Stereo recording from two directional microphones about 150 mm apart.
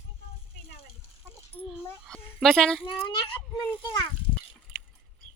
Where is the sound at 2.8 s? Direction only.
30° left (ahead or behind).